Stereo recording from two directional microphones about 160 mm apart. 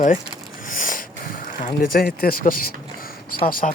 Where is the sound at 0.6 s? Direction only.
55° left (ahead or behind).